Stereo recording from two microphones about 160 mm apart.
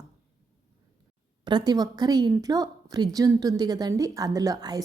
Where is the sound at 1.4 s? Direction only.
25° right (ahead or behind).